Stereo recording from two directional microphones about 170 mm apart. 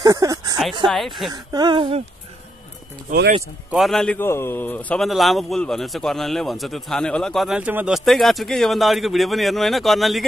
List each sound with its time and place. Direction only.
0.0 s speech: 20° right (ahead or behind)
0.8 s a man's voice: centre (ahead or behind)
1.3 s speech: 25° right (ahead or behind)
3.7 s a man's voice: centre (ahead or behind)